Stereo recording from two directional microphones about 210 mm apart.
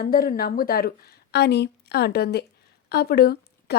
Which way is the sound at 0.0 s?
45° left (ahead or behind).